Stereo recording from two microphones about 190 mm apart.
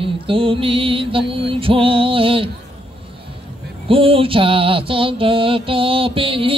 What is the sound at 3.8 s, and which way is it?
Mantra, 30° right (ahead or behind).